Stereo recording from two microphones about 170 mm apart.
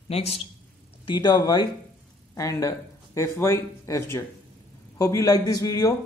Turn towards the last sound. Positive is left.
turn(degrees=20)  # may be behind; listen again after turning